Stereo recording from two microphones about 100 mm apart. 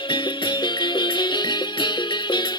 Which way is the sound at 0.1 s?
50° left (ahead or behind).